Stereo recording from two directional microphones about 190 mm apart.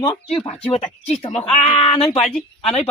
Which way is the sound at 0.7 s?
35° left (ahead or behind).